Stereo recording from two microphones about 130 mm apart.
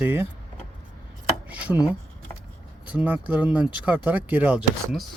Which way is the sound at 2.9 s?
10° right (ahead or behind).